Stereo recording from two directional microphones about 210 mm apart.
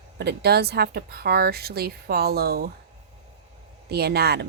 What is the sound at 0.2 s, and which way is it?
Speech, 50° right (ahead or behind).